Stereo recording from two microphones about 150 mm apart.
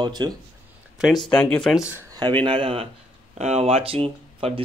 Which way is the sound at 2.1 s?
35° right (ahead or behind).